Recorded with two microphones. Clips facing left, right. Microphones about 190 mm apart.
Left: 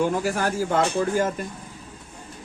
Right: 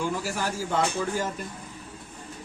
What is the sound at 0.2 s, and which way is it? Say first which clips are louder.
Speech: left 6 dB; 55° left (ahead or behind).